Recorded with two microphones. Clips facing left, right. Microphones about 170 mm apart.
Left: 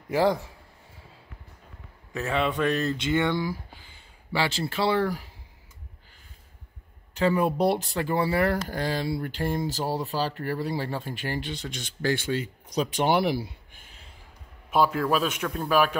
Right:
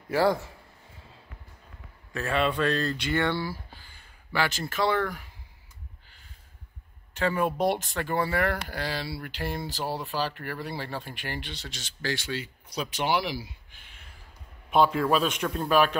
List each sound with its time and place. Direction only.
0.1 s speech: 20° left (ahead or behind)
2.1 s speech: 20° left (ahead or behind)
4.3 s speech: 25° left (ahead or behind)
7.2 s speech: 35° left (ahead or behind); by 13.8 s 55° left (ahead or behind)
14.7 s a man's voice: 5° left (ahead or behind)